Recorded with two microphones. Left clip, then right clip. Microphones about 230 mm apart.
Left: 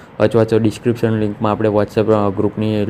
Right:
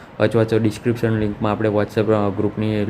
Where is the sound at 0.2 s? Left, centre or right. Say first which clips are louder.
Left 4 dB; centre.